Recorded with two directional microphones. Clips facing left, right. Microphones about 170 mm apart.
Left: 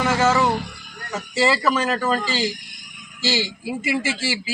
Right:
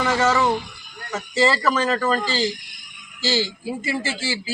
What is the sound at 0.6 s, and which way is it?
Speech, 60° left (ahead or behind).